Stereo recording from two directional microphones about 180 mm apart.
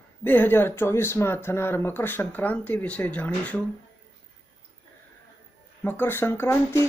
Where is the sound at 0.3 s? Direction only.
10° left (ahead or behind).